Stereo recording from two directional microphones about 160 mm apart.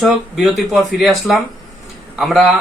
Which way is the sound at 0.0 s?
Centre (ahead or behind).